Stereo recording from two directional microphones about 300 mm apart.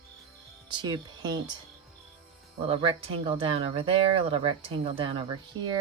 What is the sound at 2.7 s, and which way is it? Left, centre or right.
Speech, centre.